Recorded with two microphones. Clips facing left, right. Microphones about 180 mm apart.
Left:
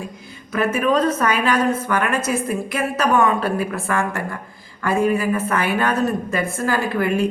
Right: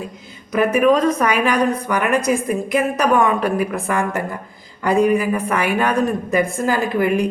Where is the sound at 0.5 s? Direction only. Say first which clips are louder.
Right 4 dB; 15° right (ahead or behind).